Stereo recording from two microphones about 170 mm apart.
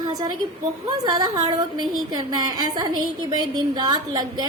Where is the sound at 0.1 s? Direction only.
25° right (ahead or behind).